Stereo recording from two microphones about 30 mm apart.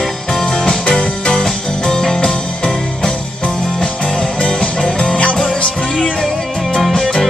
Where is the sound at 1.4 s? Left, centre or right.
Centre.